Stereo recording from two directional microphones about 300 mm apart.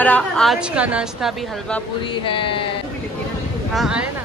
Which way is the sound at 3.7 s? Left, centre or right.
Centre.